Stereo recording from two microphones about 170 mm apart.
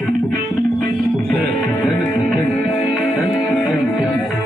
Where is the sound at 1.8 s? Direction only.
Centre (ahead or behind).